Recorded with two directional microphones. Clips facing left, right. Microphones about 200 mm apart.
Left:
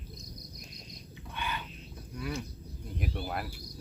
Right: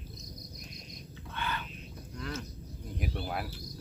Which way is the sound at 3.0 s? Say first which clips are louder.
Even; centre (ahead or behind).